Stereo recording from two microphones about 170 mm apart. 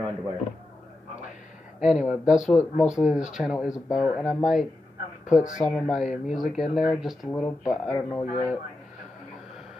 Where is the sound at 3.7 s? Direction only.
20° left (ahead or behind).